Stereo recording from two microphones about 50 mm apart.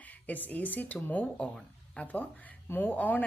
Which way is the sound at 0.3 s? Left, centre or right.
Left.